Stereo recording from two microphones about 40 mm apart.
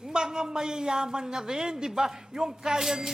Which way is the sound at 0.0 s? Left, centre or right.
Centre.